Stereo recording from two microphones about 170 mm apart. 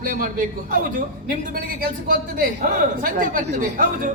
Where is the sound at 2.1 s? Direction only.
55° right (ahead or behind).